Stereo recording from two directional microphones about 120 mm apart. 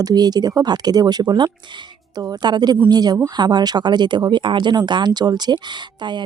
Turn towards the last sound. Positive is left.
turn(degrees=-40)  # may be behind; listen again after turning